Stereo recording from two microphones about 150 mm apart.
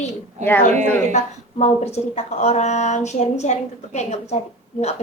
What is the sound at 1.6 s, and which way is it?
Speech, 45° left (ahead or behind).